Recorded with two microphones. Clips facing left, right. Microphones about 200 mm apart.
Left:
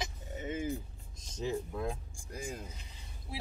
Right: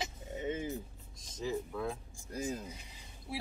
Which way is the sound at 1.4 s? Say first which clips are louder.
Left 1 dB; 20° left (ahead or behind).